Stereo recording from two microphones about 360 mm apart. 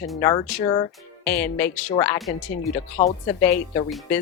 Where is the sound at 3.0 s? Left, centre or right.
Centre.